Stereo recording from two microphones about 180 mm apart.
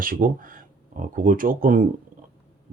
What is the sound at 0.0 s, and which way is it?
Speech, 50° right (ahead or behind).